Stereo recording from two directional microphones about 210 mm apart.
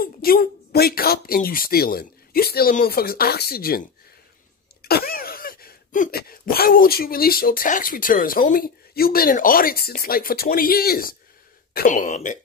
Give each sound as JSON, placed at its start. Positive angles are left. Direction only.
{"t": 0.0, "sound": "speech", "side_deg": 45}